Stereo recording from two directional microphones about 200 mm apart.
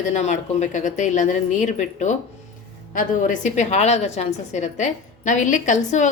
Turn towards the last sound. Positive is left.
turn(degrees=40)  # may be behind; listen again after turning